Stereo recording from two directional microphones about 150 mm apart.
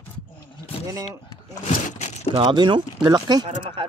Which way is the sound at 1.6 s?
50° left (ahead or behind).